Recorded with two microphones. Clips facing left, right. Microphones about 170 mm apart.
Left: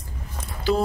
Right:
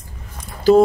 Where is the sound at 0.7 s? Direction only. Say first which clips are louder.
Right 11 dB; 40° right (ahead or behind).